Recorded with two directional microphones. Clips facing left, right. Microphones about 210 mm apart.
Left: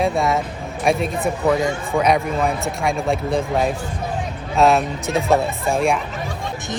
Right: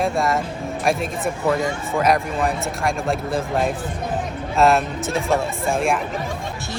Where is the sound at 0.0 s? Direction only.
Centre (ahead or behind).